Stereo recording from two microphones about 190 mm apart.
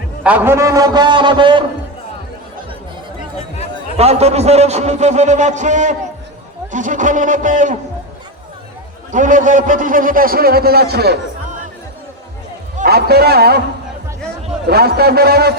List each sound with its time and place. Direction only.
0.2 s a man's voice: 10° right (ahead or behind); by 1.6 s 25° right (ahead or behind)
3.9 s a man's voice: 35° right (ahead or behind)
9.1 s a man's voice: 40° right (ahead or behind); by 11.2 s 55° right (ahead or behind)
12.8 s a man's voice: 55° right (ahead or behind)
14.7 s a man's voice: 55° right (ahead or behind)